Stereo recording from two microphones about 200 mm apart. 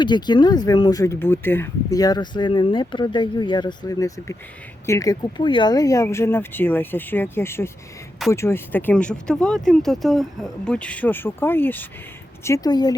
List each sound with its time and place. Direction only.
0.0 s speech: 20° left (ahead or behind)